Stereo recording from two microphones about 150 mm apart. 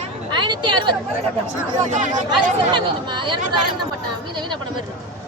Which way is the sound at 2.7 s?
30° right (ahead or behind).